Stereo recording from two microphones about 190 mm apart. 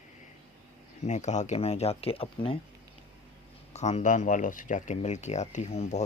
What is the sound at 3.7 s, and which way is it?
Speech, 35° left (ahead or behind).